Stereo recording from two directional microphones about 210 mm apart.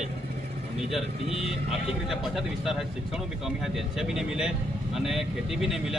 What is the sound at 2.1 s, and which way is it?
Speech, centre (ahead or behind).